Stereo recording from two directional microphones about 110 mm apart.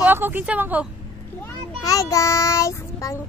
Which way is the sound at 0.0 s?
20° right (ahead or behind).